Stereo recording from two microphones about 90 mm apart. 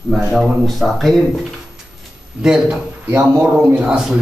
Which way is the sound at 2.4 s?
5° right (ahead or behind).